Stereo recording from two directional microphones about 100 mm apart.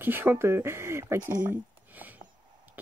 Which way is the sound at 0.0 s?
20° right (ahead or behind).